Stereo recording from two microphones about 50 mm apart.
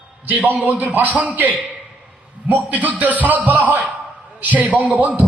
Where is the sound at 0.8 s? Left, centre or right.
Right.